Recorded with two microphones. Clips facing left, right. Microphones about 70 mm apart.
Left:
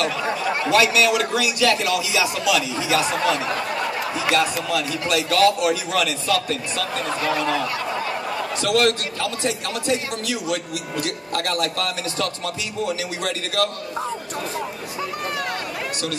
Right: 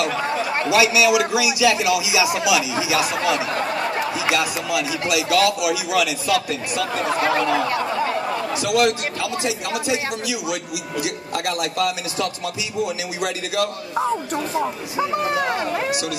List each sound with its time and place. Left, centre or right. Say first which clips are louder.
0.7 s a man's voice: right 1 dB; centre
7.5 s speech: right 4 dB; right
8.5 s a man's voice: even; centre